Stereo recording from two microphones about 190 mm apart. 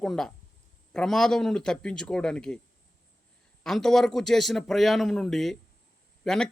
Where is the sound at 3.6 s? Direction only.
Centre (ahead or behind).